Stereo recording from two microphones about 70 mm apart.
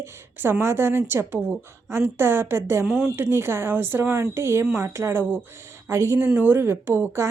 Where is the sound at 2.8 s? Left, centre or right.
Centre.